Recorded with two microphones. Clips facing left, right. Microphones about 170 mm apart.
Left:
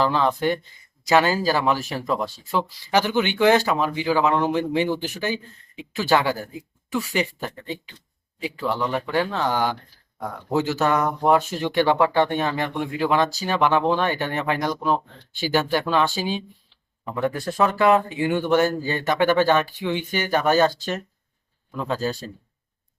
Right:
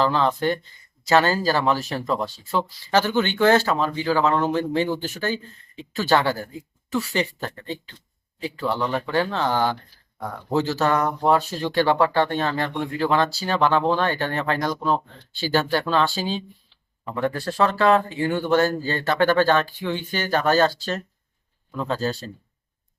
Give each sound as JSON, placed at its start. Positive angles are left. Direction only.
{"t": 0.0, "sound": "speech", "side_deg": 10}